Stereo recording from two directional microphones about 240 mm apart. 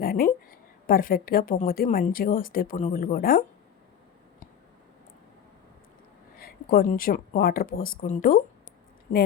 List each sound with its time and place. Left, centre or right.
0.0 s a sound: left
0.9 s a woman's voice: left
6.4 s a woman's voice: left